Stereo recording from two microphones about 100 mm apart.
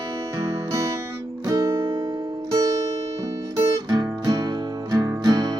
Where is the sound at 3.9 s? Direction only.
40° right (ahead or behind).